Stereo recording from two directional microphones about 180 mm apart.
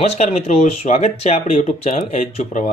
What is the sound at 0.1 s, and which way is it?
Speech, 35° left (ahead or behind).